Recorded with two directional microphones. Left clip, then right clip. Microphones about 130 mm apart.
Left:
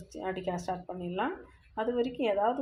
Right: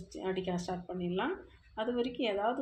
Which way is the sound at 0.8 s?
35° left (ahead or behind).